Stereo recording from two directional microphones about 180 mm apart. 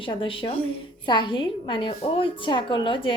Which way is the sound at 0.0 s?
30° left (ahead or behind).